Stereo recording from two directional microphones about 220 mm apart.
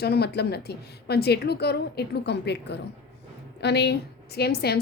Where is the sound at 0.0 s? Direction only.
45° left (ahead or behind).